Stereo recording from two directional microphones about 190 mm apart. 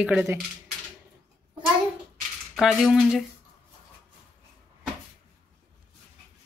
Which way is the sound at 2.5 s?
Centre (ahead or behind).